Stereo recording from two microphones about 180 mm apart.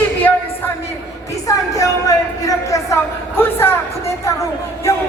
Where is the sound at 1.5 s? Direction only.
20° left (ahead or behind).